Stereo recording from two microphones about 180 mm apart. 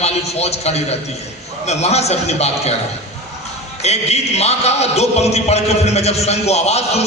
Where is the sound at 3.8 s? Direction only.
35° left (ahead or behind).